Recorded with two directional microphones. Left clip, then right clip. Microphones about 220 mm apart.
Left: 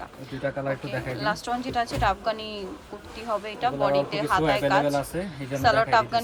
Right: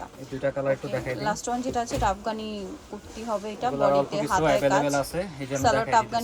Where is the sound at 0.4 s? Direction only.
5° right (ahead or behind).